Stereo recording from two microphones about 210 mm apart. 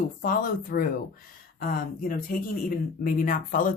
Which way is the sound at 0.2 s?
40° left (ahead or behind).